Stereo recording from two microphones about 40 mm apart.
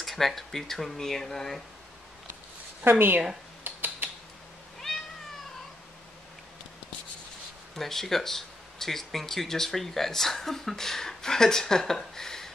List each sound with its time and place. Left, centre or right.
0.0 s speech: centre
2.8 s speech: right
3.6 s a sound: right
4.7 s cat: centre
7.7 s speech: centre